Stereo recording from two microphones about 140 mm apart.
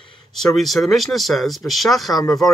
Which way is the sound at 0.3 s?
5° left (ahead or behind).